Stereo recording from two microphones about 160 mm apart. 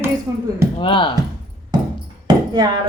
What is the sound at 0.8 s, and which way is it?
Speech, 30° left (ahead or behind).